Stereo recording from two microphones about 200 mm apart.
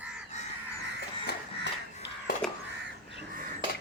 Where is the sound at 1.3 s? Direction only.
60° left (ahead or behind).